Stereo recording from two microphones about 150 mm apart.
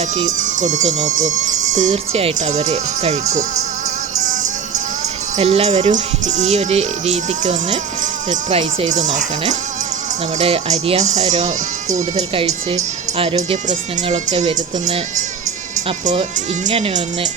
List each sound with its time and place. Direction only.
0.3 s speech: 55° right (ahead or behind)
5.4 s speech: 40° right (ahead or behind)
10.3 s speech: 45° right (ahead or behind)
16.6 s speech: 45° right (ahead or behind)